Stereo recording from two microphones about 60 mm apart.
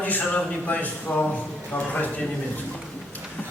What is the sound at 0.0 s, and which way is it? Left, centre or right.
A man's voice, left.